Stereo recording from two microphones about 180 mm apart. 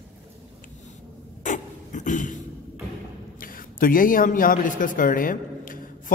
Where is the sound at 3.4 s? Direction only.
50° left (ahead or behind).